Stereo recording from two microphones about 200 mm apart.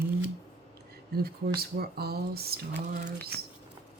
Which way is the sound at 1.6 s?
50° right (ahead or behind).